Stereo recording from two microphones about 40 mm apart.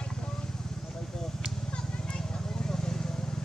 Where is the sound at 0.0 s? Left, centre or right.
Left.